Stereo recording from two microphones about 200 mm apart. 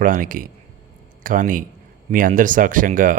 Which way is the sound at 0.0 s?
40° right (ahead or behind).